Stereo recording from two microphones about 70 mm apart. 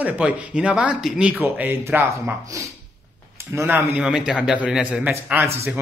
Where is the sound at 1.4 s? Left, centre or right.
Right.